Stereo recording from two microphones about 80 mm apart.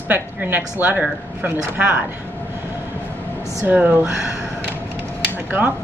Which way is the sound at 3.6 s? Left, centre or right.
Right.